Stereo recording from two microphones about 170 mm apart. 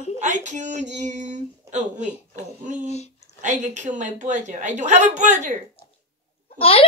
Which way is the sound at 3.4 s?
45° right (ahead or behind).